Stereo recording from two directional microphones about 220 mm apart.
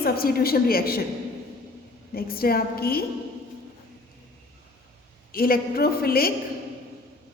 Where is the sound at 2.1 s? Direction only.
45° left (ahead or behind).